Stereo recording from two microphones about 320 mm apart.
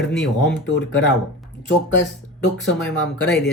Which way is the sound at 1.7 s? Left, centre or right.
Left.